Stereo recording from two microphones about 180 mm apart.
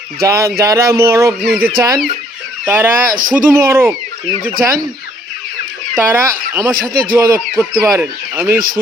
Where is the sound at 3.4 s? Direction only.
15° right (ahead or behind).